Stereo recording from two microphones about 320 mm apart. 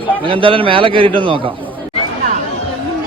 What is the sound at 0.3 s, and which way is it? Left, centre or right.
A man's voice, centre.